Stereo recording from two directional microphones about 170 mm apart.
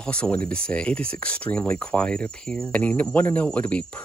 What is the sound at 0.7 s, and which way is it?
Speech, 5° left (ahead or behind).